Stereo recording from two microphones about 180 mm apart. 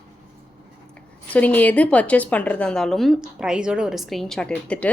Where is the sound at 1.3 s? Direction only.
10° left (ahead or behind).